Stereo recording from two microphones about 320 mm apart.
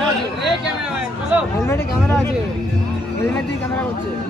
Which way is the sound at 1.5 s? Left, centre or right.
Centre.